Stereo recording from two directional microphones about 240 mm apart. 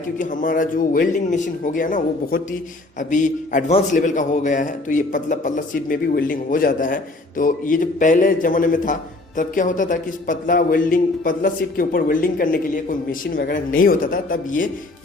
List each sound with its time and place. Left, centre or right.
0.2 s a man's voice: left